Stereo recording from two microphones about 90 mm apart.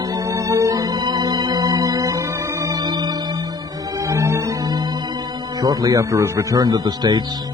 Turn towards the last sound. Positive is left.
turn(degrees=-50)  # may be behind; listen again after turning